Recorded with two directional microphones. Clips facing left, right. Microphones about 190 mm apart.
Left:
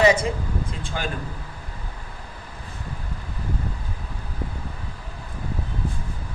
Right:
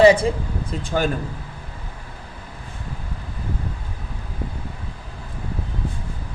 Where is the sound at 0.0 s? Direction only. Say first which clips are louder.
Right 5 dB; 30° right (ahead or behind).